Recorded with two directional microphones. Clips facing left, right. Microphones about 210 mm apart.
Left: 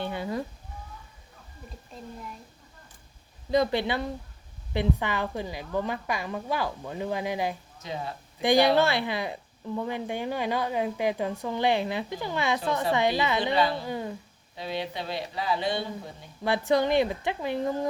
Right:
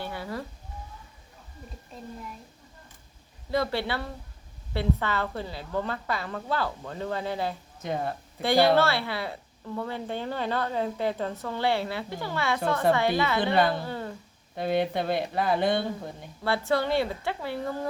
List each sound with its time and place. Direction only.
0.0 s a sound: 20° left (ahead or behind)
3.5 s a woman's voice: 20° left (ahead or behind)
7.8 s speech: 55° right (ahead or behind)
8.4 s a woman's voice: 15° left (ahead or behind)
13.4 s a woman's voice: 55° right (ahead or behind)
13.8 s speech: 15° left (ahead or behind)
14.5 s speech: 55° right (ahead or behind)
16.4 s a woman's voice: 15° left (ahead or behind)